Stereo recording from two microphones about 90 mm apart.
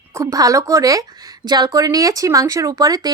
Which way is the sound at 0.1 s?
35° right (ahead or behind).